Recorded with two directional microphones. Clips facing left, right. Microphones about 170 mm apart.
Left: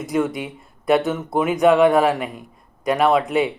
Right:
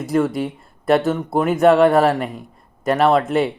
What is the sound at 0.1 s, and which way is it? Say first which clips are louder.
Speech: right 3 dB; centre (ahead or behind).